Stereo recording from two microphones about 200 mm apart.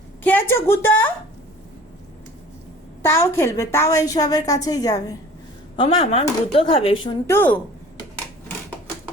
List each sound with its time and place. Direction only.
0.2 s a woman's voice: 10° left (ahead or behind)
3.0 s a woman's voice: 15° left (ahead or behind)
7.3 s a woman's voice: 10° left (ahead or behind)